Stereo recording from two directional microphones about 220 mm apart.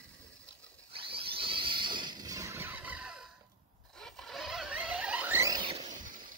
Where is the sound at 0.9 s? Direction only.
25° right (ahead or behind).